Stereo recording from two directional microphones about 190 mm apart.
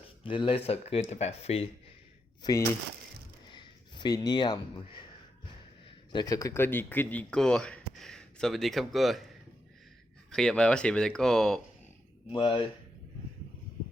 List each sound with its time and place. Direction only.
0.2 s speech: 25° left (ahead or behind)
2.4 s speech: 15° left (ahead or behind)
3.5 s a sound: 25° left (ahead or behind)
6.1 s speech: 20° left (ahead or behind); by 9.2 s centre (ahead or behind)
10.3 s speech: 5° left (ahead or behind)
12.3 s speech: 25° left (ahead or behind)